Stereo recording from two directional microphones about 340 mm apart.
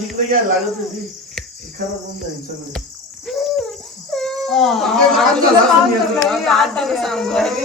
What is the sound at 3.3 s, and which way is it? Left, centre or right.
Bird, centre.